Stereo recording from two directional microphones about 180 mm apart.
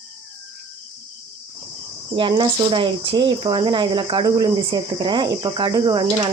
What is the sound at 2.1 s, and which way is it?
Speech, 25° right (ahead or behind).